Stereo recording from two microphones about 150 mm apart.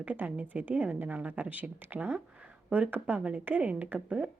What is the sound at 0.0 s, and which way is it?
A woman's voice, 10° right (ahead or behind).